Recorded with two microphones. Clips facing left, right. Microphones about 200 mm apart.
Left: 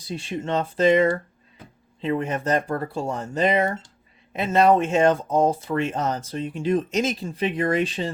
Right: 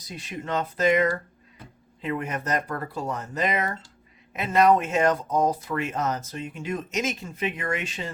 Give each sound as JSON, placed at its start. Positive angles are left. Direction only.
{"t": 0.0, "sound": "speech", "side_deg": 30}